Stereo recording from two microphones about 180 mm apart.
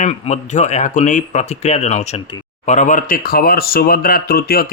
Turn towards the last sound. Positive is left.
turn(degrees=55)  # may be behind; listen again after turning